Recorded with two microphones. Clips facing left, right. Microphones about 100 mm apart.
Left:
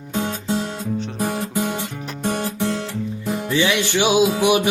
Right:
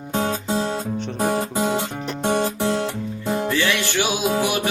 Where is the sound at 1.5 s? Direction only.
25° right (ahead or behind).